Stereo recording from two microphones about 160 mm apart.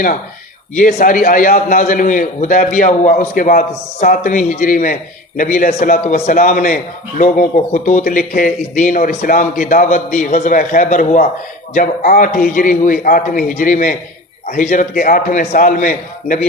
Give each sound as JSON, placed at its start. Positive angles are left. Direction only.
{"t": 0.8, "sound": "a man's voice", "side_deg": 60}